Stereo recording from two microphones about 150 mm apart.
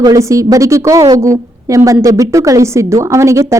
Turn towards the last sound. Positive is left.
turn(degrees=-20)  # may be behind; listen again after turning